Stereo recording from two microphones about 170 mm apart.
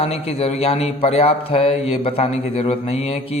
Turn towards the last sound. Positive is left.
turn(degrees=35)  # may be behind; listen again after turning